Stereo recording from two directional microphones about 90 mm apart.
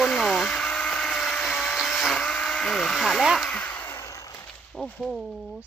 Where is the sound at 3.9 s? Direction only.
35° left (ahead or behind).